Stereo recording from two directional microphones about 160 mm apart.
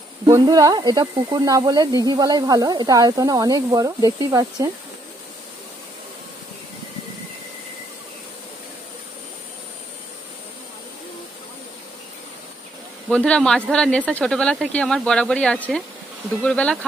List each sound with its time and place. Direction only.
0.3 s speech: 25° right (ahead or behind)
13.1 s speech: 5° left (ahead or behind)